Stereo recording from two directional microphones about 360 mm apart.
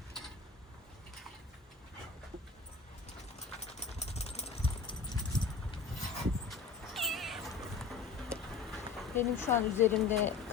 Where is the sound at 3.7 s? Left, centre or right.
Centre.